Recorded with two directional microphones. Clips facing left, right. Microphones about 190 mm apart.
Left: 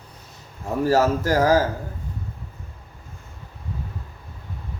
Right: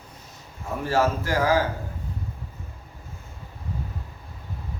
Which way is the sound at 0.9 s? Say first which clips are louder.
Left 4 dB; 40° left (ahead or behind).